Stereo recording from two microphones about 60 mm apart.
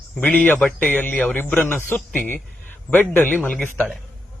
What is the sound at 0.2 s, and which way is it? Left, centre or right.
A man's voice, left.